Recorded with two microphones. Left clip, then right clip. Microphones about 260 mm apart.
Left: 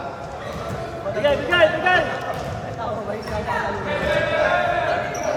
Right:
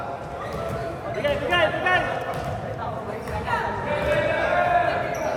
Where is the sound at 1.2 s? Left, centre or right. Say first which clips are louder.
Left 5 dB; left.